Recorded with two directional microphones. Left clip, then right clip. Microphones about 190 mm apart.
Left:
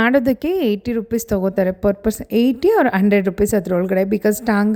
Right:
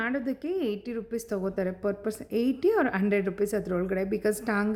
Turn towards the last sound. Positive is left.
turn(degrees=40)  # may be behind; listen again after turning